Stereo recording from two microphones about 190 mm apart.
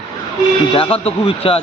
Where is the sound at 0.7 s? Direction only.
30° left (ahead or behind).